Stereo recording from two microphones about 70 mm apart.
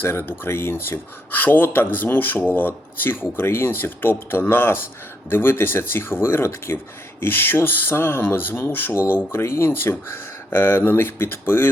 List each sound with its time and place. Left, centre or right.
0.0 s speech: left